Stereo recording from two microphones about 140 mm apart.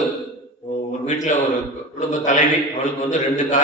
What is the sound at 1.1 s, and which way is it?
A man's voice, 60° left (ahead or behind).